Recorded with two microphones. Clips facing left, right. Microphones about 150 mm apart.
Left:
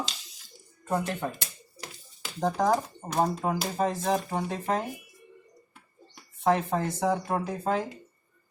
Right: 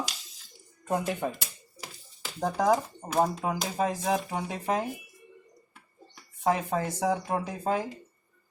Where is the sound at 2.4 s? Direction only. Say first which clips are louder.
Even; 5° right (ahead or behind).